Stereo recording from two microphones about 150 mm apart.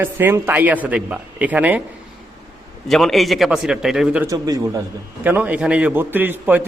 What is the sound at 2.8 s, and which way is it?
A man's voice, centre (ahead or behind).